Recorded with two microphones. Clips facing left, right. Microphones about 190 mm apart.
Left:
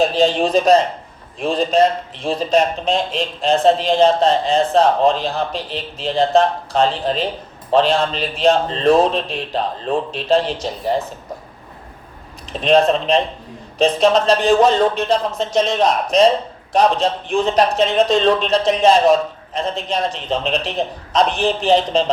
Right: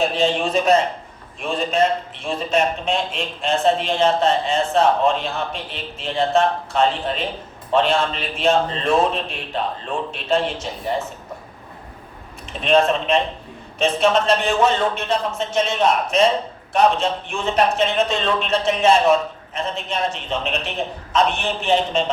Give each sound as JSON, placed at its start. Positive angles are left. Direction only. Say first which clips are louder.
{"t": 0.0, "sound": "a man's voice", "louder": "left 4 dB", "side_deg": 35}
{"t": 12.5, "sound": "a man's voice", "louder": "left 3 dB", "side_deg": 35}